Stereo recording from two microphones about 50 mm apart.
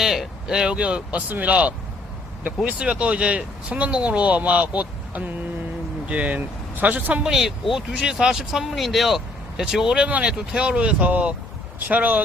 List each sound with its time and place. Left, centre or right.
0.0 s speech: centre; by 1.2 s right
1.3 s speech: right
7.3 s speech: centre; by 12.2 s right